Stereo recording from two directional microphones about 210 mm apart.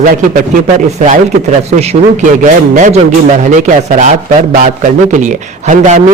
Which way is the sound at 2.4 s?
35° right (ahead or behind).